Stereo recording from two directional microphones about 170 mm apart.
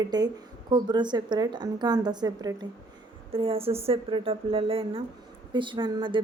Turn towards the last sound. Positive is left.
turn(degrees=-30)  # may be behind; listen again after turning